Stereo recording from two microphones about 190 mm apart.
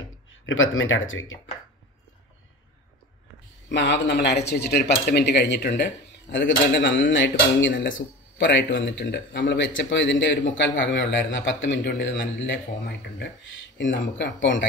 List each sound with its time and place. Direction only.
0.5 s speech: 90° left
3.7 s speech: 70° left (ahead or behind)